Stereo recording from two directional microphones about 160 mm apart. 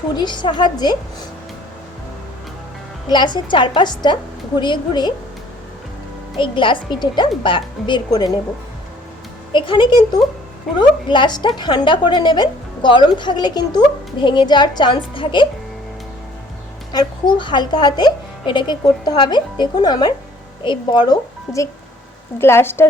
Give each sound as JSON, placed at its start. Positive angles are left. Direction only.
{"t": 0.2, "sound": "a woman's voice", "side_deg": 30}
{"t": 3.1, "sound": "a woman's voice", "side_deg": 25}
{"t": 6.3, "sound": "a woman's voice", "side_deg": 30}
{"t": 9.5, "sound": "a woman's voice", "side_deg": 30}
{"t": 16.9, "sound": "a woman's voice", "side_deg": 25}